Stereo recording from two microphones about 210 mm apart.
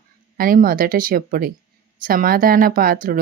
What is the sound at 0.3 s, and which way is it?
Speech, 40° right (ahead or behind).